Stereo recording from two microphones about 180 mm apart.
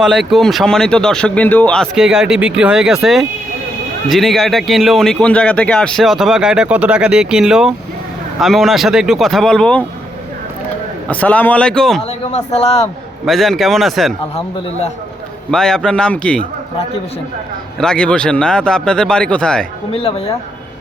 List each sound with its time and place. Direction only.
0.0 s speech: centre (ahead or behind)
11.1 s speech: 10° left (ahead or behind)
12.0 s a man's voice: 35° left (ahead or behind)
13.2 s speech: centre (ahead or behind)
15.4 s speech: 5° left (ahead or behind)
17.7 s speech: 5° left (ahead or behind)
19.9 s speech: 35° left (ahead or behind)